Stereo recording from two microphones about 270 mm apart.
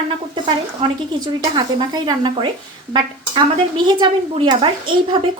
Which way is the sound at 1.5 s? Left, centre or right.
Centre.